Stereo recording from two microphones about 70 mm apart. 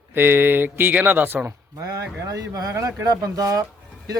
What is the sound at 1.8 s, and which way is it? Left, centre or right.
Speech, right.